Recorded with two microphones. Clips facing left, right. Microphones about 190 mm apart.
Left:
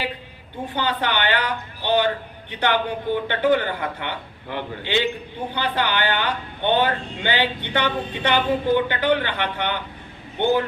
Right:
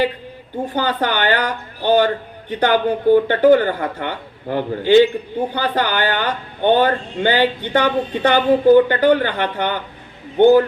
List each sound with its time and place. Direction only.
0.6 s speech: 45° right (ahead or behind)